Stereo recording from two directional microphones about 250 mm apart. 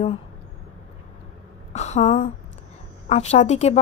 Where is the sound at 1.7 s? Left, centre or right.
Left.